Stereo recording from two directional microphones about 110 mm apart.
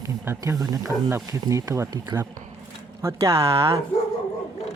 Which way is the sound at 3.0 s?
25° right (ahead or behind).